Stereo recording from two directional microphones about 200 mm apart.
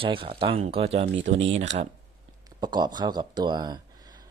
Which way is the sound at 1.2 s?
65° right (ahead or behind).